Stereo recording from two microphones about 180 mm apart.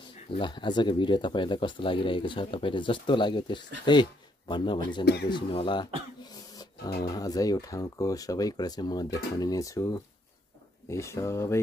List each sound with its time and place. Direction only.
0.3 s speech: 25° left (ahead or behind)
5.0 s speech: 65° left (ahead or behind)
5.3 s speech: 25° left (ahead or behind)
6.2 s throat clearing: 20° left (ahead or behind)
7.2 s speech: 20° left (ahead or behind)